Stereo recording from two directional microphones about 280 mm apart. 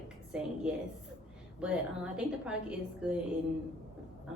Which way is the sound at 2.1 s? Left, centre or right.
Centre.